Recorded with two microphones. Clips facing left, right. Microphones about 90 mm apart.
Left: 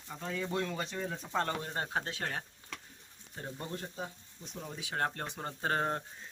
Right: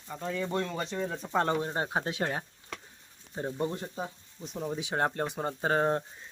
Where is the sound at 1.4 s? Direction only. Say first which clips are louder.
Right 6 dB; 20° right (ahead or behind).